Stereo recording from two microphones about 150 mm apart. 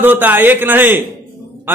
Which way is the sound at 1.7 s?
15° right (ahead or behind).